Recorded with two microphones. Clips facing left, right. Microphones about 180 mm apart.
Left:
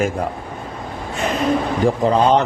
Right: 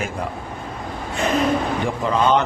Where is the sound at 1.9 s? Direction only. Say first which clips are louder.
Left 5 dB; 35° left (ahead or behind).